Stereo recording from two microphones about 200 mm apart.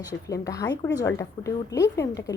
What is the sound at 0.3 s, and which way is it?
Speech, 15° left (ahead or behind).